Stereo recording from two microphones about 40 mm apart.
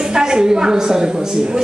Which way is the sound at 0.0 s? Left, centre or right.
Centre.